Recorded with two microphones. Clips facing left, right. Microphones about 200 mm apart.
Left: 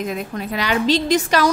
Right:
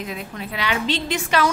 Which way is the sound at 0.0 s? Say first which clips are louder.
Left 6 dB; 45° left (ahead or behind).